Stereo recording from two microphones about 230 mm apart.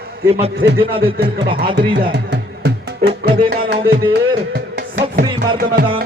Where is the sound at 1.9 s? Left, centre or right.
Right.